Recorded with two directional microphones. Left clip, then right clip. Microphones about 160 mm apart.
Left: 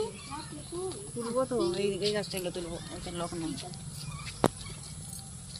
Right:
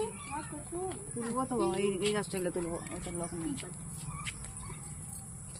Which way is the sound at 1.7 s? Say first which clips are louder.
Left 1 dB; 70° right (ahead or behind).